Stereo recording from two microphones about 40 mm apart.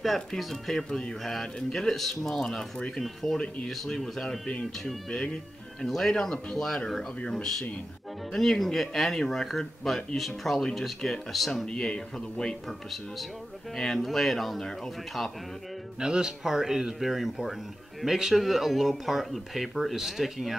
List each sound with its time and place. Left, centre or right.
0.4 s speech: centre
0.8 s speech: left
1.2 s speech: centre
4.5 s speech: left; by 11.6 s centre
11.6 s speech: left
12.6 s speech: centre
16.0 s speech: centre